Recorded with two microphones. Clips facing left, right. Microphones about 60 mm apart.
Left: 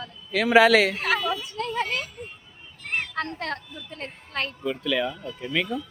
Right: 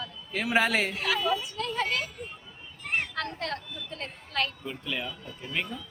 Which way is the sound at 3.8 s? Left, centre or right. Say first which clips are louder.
Left 1 dB; left.